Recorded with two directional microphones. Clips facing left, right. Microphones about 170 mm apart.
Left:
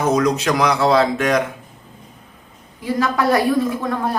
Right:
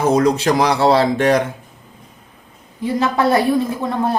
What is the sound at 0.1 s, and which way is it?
Speech, 30° right (ahead or behind).